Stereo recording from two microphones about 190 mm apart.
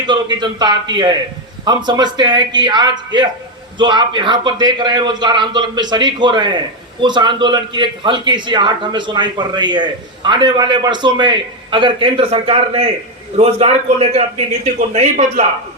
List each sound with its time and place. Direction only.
0.1 s a man's voice: 25° right (ahead or behind); by 15.4 s 40° right (ahead or behind)